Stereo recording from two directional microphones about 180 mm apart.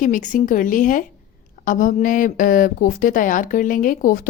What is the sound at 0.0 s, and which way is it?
Speech, 45° left (ahead or behind).